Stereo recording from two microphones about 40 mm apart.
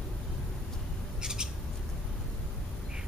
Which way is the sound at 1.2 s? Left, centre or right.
Centre.